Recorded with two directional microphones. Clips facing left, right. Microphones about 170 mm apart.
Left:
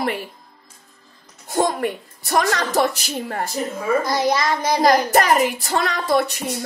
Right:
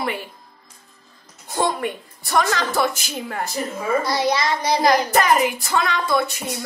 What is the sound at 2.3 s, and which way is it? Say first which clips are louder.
A woman's voice: left 1 dB; 40° left (ahead or behind).